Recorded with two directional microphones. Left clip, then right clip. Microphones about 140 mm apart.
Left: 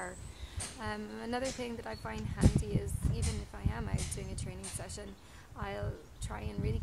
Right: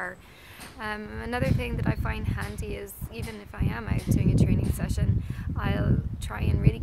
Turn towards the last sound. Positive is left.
turn(degrees=-10)  # may be behind; listen again after turning